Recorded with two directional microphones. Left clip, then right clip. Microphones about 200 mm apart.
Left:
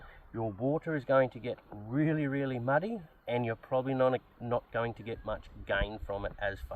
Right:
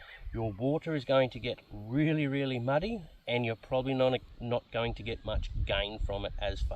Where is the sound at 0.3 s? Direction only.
25° right (ahead or behind).